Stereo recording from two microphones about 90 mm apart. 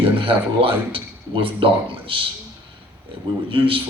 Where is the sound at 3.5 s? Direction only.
75° right (ahead or behind).